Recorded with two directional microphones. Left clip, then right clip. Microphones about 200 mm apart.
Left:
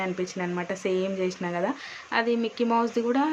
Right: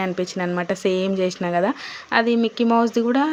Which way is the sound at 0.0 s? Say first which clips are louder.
Right 6 dB; 35° right (ahead or behind).